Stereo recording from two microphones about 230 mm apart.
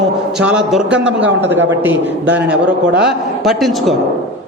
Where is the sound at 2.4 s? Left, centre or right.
Centre.